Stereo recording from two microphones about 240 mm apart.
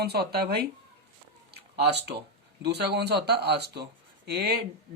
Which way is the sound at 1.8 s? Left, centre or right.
Right.